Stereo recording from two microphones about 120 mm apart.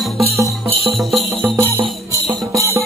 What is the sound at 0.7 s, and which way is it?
Music, 50° right (ahead or behind).